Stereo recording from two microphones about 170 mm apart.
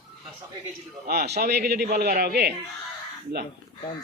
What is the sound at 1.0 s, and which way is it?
A man's voice, 65° right (ahead or behind).